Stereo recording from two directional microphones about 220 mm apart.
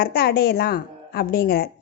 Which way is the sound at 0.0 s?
45° left (ahead or behind).